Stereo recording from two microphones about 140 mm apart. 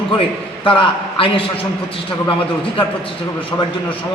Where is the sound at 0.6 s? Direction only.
40° left (ahead or behind).